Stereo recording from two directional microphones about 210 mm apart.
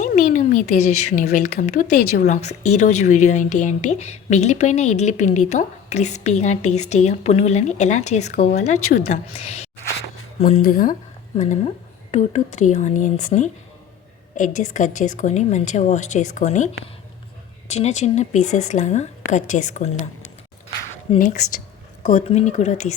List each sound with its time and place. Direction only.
0.0 s a woman's voice: 40° left (ahead or behind)
12.1 s a woman's voice: 35° left (ahead or behind)
17.7 s a woman's voice: 30° left (ahead or behind)
21.1 s a woman's voice: 25° left (ahead or behind)